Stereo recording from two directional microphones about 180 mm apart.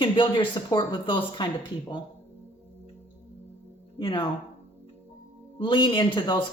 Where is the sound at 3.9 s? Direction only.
25° left (ahead or behind).